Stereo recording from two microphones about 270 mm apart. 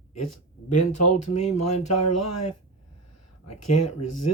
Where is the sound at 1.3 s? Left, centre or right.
Left.